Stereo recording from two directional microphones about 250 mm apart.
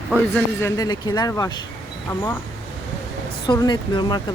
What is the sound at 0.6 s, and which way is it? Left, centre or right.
Speech, centre.